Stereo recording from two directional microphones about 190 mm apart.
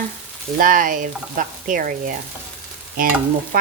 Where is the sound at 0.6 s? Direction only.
45° right (ahead or behind).